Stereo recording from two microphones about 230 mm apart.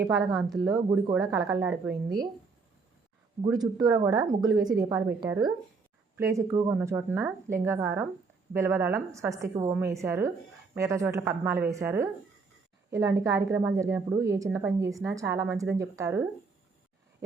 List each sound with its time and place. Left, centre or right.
0.3 s speech: centre
3.4 s speech: centre